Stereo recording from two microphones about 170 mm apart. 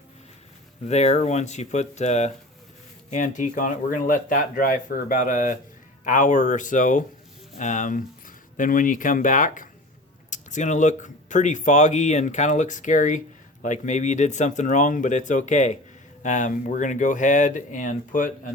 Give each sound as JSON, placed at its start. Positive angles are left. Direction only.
{"t": 0.9, "sound": "speech", "side_deg": 40}